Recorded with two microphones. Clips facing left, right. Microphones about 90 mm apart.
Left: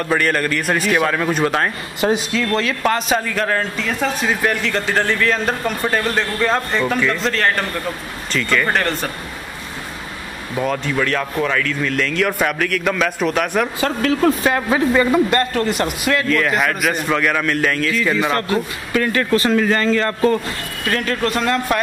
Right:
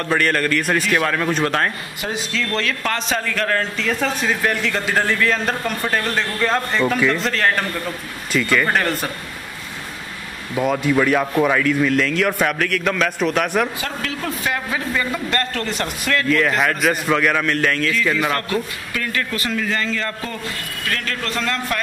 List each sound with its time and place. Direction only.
0.0 s a man's voice: 5° left (ahead or behind)
10.5 s a man's voice: 5° right (ahead or behind)
13.7 s speech: 40° left (ahead or behind)
15.2 s a man's voice: 10° left (ahead or behind)
18.1 s a man's voice: 20° left (ahead or behind)
18.9 s speech: 35° left (ahead or behind)
20.8 s a man's voice: 25° left (ahead or behind)